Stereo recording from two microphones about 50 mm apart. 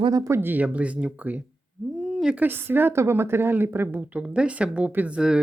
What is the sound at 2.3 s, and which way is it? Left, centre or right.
Speech, right.